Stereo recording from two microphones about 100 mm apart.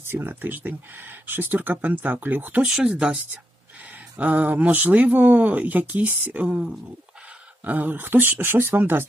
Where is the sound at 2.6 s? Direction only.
5° right (ahead or behind).